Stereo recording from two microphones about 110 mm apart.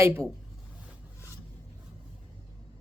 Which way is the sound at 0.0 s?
25° right (ahead or behind).